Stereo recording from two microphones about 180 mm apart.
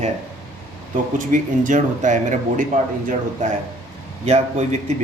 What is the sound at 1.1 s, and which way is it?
A man's voice, 45° right (ahead or behind).